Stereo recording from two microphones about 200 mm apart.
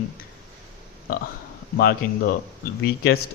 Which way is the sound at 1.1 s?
45° left (ahead or behind).